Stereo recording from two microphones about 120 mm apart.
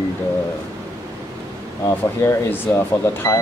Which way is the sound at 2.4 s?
20° left (ahead or behind).